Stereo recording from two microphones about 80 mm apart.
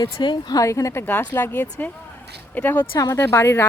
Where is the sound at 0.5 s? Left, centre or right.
Left.